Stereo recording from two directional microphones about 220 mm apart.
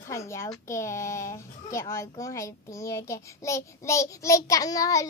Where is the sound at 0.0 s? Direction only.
15° left (ahead or behind).